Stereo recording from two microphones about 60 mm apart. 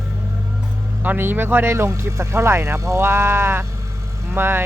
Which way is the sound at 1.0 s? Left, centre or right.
Right.